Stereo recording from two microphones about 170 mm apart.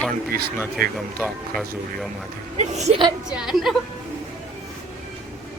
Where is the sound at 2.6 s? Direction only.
40° right (ahead or behind).